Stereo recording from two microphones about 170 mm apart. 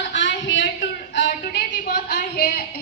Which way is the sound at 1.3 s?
60° left (ahead or behind).